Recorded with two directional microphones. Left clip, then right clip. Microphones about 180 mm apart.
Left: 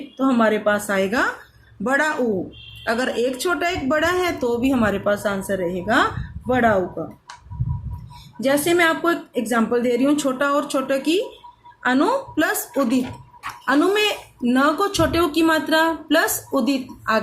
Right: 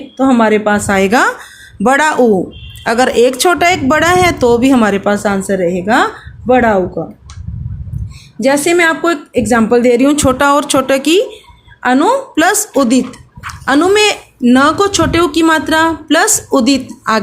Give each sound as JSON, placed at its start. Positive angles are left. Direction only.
{"t": 0.2, "sound": "a woman's voice", "side_deg": -35}
{"t": 8.4, "sound": "speech", "side_deg": -40}